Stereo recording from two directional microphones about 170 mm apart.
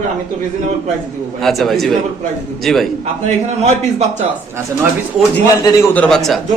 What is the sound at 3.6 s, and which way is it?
Speech, 40° right (ahead or behind).